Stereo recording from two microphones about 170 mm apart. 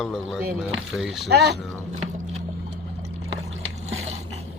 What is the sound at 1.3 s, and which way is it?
Speech, 75° right (ahead or behind).